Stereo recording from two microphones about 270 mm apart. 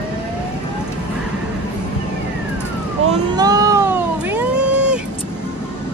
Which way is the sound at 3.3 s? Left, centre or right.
Centre.